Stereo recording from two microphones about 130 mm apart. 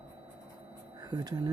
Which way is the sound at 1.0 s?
30° right (ahead or behind).